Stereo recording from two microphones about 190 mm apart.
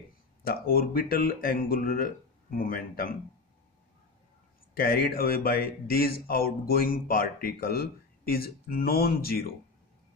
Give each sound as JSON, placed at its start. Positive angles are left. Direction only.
{"t": 0.4, "sound": "speech", "side_deg": 50}
{"t": 4.7, "sound": "speech", "side_deg": 50}